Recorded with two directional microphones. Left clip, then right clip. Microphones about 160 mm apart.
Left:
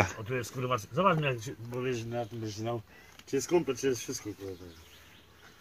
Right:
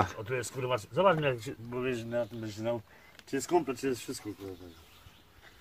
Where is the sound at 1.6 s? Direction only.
75° right (ahead or behind).